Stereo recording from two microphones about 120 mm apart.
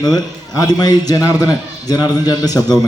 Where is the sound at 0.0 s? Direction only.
35° left (ahead or behind).